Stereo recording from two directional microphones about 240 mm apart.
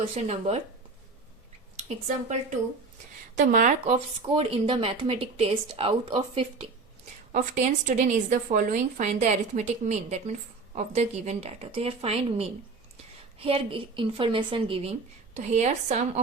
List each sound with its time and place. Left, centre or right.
0.2 s speech: right
3.3 s speech: right